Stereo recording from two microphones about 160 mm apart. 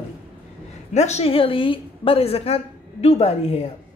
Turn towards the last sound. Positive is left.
turn(degrees=40)  # may be behind; listen again after turning